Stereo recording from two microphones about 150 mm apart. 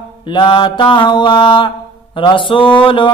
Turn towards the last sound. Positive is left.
turn(degrees=35)  # may be behind; listen again after turning